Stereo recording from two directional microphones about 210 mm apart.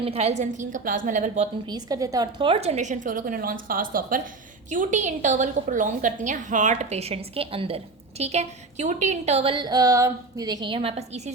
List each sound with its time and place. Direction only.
0.0 s a woman's voice: 30° right (ahead or behind)
1.6 s a woman's voice: 20° right (ahead or behind)